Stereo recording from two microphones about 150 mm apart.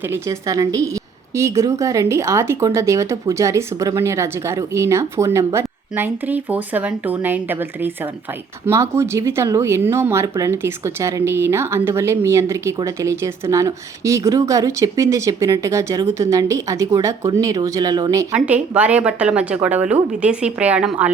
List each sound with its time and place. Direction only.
0.1 s speech: 20° right (ahead or behind)
18.3 s speech: 10° right (ahead or behind)